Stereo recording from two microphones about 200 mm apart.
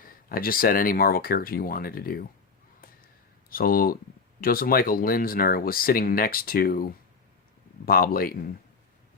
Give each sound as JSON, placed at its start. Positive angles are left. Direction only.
{"t": 0.0, "sound": "speech", "side_deg": 45}
{"t": 3.5, "sound": "speech", "side_deg": 45}